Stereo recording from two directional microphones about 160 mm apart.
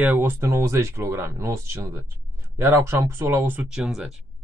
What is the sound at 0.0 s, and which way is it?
Speech, 10° right (ahead or behind).